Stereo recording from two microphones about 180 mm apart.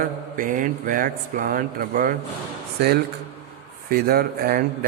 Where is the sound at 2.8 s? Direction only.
60° right (ahead or behind).